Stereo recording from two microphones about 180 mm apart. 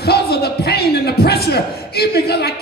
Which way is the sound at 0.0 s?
60° left (ahead or behind).